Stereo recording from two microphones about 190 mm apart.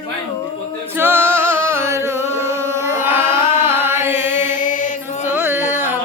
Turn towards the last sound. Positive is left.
turn(degrees=-10)  # may be behind; listen again after turning